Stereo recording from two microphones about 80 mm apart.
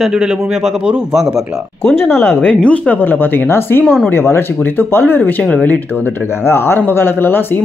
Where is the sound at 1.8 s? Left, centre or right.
Left.